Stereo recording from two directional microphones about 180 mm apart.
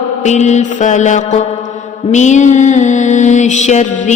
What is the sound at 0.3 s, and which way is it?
Mantra, 40° left (ahead or behind).